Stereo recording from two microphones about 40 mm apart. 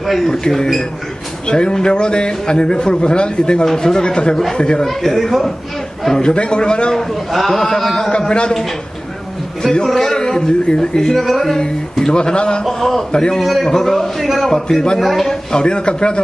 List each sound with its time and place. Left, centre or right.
0.0 s a sound: centre
0.3 s a man's voice: centre
4.8 s a man's voice: centre
6.0 s a man's voice: centre
7.3 s a man's voice: centre
8.1 s a man's voice: left
9.6 s a man's voice: centre
12.0 s a man's voice: centre
12.6 s a man's voice: centre
13.1 s a man's voice: centre
13.4 s a man's voice: centre
15.0 s a man's voice: centre
15.5 s a man's voice: left